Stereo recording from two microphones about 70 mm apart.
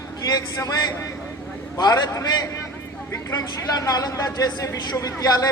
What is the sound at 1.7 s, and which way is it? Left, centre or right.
Speech, left.